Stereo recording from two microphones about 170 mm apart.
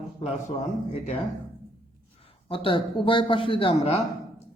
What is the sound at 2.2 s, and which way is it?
A man's voice, 30° left (ahead or behind).